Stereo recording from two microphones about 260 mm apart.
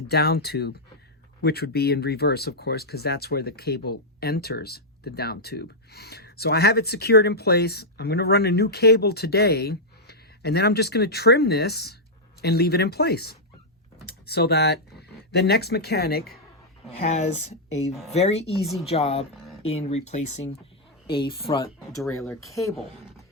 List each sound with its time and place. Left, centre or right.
0.1 s speech: left
17.0 s speech: left